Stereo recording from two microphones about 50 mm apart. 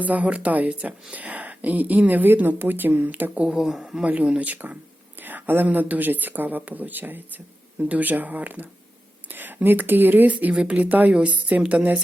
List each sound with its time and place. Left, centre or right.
0.0 s speech: right
3.4 s speech: centre
4.0 s speech: right
5.2 s a sound: right
5.6 s speech: right
10.5 s speech: right